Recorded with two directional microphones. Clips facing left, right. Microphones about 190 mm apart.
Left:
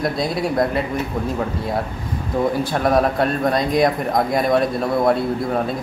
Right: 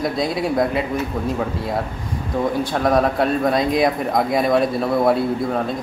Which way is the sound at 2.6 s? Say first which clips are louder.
Right 2 dB; centre (ahead or behind).